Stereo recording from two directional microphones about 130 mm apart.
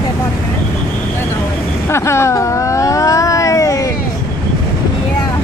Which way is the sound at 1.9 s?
20° left (ahead or behind).